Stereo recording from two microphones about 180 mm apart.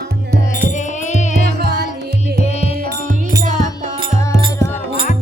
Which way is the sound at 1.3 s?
60° right (ahead or behind).